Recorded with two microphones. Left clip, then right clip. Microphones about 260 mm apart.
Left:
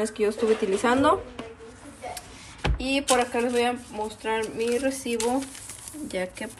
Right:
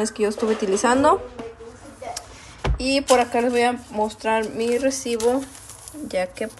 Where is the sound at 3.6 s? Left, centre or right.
Centre.